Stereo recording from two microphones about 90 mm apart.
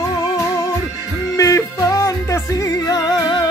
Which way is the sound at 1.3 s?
40° left (ahead or behind).